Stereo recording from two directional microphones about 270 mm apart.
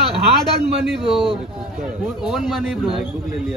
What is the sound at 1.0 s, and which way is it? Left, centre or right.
Speech, centre.